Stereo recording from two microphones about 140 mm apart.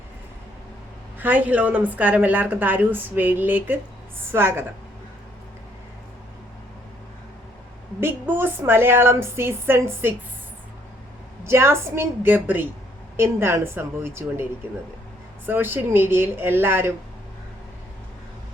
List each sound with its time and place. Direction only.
1.2 s a woman's voice: 10° right (ahead or behind)
8.0 s a woman's voice: 15° right (ahead or behind)
11.4 s a woman's voice: 20° right (ahead or behind)
15.4 s a woman's voice: 15° right (ahead or behind)